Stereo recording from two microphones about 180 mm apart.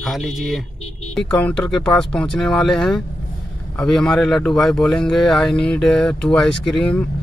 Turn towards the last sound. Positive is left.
turn(degrees=5)  # may be behind; listen again after turning